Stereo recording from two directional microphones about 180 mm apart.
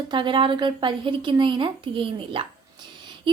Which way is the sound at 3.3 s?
30° right (ahead or behind).